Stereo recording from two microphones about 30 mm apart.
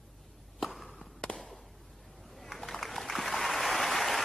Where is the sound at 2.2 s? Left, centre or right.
Centre.